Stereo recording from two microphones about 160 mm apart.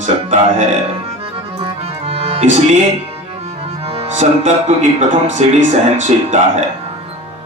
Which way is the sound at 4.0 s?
45° right (ahead or behind).